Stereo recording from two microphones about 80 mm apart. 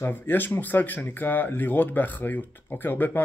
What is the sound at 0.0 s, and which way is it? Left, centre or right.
Speech, left.